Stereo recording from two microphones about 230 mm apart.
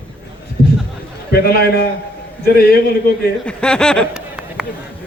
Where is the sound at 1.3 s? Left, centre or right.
Left.